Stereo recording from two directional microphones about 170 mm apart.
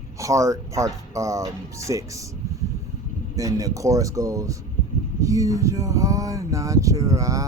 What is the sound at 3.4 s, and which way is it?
Speech, 20° right (ahead or behind).